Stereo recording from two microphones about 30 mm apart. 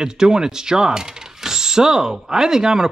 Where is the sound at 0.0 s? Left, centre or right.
Right.